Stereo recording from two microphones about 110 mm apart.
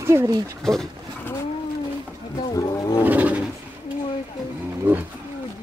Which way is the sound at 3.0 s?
15° right (ahead or behind).